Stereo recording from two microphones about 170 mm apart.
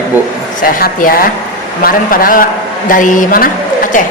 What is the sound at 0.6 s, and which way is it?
A woman's voice, 55° left (ahead or behind).